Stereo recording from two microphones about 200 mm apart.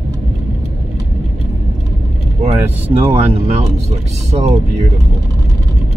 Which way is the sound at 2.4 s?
30° right (ahead or behind).